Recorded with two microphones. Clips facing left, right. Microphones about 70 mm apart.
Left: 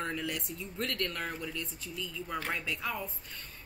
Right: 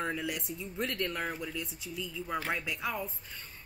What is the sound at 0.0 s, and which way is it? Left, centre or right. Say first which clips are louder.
A woman's voice: right 1 dB; centre.